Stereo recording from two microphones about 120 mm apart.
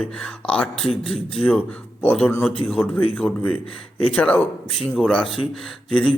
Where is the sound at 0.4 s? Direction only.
10° left (ahead or behind).